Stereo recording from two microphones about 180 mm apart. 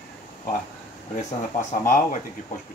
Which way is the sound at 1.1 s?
45° left (ahead or behind).